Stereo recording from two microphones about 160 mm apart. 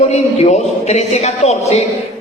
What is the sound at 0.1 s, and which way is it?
Speech, 45° left (ahead or behind).